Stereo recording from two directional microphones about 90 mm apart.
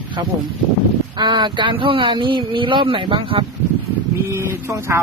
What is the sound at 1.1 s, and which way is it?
Speech, 60° right (ahead or behind).